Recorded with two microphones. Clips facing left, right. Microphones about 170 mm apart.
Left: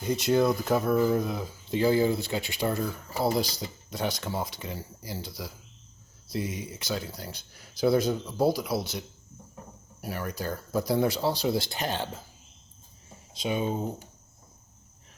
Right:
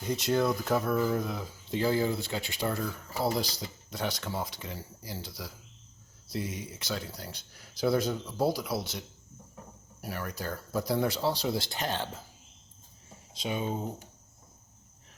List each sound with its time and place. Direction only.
0.0 s speech: 10° left (ahead or behind)
13.3 s speech: 15° left (ahead or behind)